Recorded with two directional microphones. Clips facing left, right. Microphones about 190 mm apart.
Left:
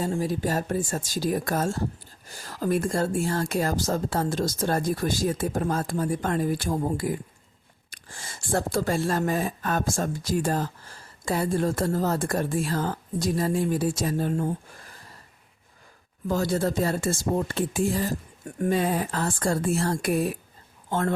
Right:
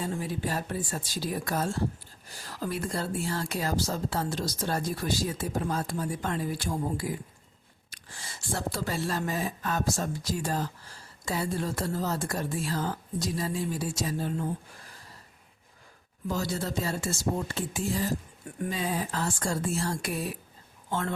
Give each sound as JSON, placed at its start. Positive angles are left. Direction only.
{"t": 0.0, "sound": "speech", "side_deg": 40}
{"t": 16.3, "sound": "speech", "side_deg": 50}